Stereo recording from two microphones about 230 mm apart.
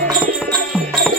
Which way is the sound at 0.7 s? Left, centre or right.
Centre.